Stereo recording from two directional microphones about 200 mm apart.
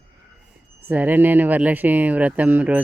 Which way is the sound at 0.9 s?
10° right (ahead or behind).